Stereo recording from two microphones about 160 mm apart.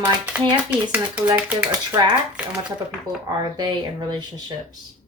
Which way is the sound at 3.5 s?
25° right (ahead or behind).